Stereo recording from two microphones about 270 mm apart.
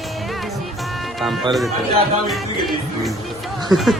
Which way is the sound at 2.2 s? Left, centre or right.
Centre.